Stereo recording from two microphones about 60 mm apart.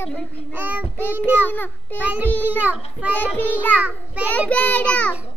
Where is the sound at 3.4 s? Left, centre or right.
Left.